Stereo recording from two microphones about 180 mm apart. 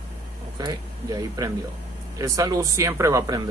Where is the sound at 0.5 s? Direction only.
20° right (ahead or behind).